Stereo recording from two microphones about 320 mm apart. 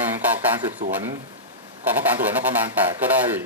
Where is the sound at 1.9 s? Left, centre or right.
Centre.